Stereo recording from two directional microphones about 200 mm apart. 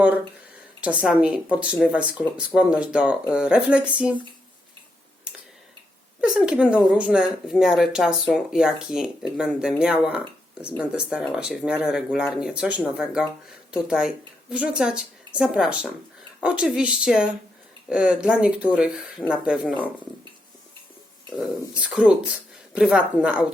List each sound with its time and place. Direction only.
0.8 s speech: 5° right (ahead or behind)
6.2 s speech: 5° right (ahead or behind)
21.8 s speech: 5° right (ahead or behind)